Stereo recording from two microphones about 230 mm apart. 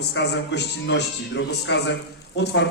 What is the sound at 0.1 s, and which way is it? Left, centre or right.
A man's voice, left.